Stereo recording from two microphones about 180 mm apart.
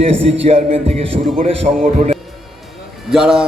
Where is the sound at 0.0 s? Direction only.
30° right (ahead or behind).